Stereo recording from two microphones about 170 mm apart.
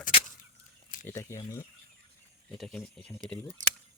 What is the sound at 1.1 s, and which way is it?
Speech, 15° left (ahead or behind).